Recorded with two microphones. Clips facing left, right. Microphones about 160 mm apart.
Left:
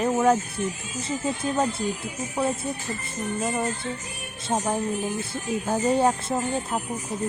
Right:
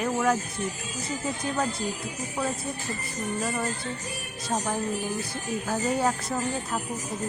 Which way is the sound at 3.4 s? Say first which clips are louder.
Left 4 dB; 20° left (ahead or behind).